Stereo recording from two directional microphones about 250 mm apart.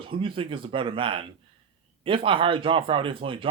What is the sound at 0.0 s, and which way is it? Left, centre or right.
Speech, right.